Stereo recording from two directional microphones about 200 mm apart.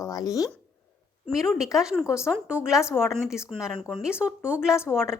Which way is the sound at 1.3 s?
Centre (ahead or behind).